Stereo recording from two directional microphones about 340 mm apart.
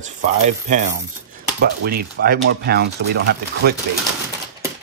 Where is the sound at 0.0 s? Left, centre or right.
Right.